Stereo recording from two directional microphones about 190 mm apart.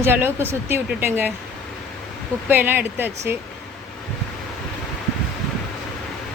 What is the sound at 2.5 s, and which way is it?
Speech, 10° right (ahead or behind).